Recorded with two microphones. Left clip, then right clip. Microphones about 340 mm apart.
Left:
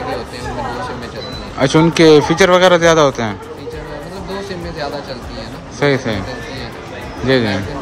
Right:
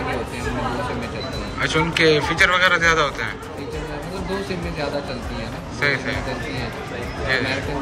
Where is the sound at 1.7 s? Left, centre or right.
Centre.